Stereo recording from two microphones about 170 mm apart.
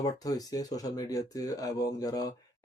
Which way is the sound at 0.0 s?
20° left (ahead or behind).